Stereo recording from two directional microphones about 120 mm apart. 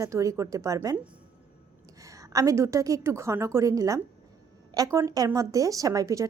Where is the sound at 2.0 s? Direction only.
25° right (ahead or behind).